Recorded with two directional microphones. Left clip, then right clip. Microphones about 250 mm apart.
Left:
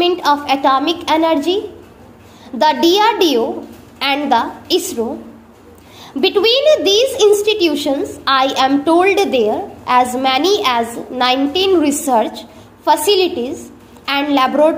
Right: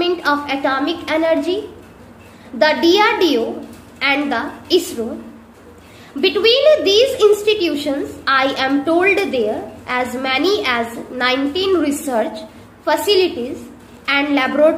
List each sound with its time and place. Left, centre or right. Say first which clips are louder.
0.0 s a woman's voice: left 3 dB; left
2.6 s a woman's voice: left 1 dB; left
6.2 s a woman's voice: left 1 dB; left